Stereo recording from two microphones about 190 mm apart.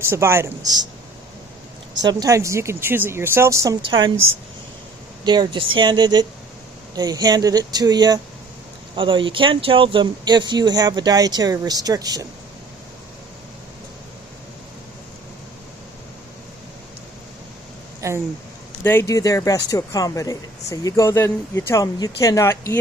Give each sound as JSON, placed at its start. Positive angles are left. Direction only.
{"t": 0.0, "sound": "speech", "side_deg": -15}
{"t": 2.0, "sound": "speech", "side_deg": -20}
{"t": 5.2, "sound": "speech", "side_deg": -25}
{"t": 18.0, "sound": "speech", "side_deg": -15}
{"t": 18.8, "sound": "speech", "side_deg": 10}